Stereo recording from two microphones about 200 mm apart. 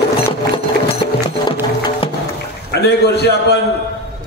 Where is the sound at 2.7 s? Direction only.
55° left (ahead or behind).